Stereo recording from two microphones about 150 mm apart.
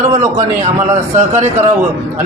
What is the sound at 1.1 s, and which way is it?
Speech, 50° right (ahead or behind).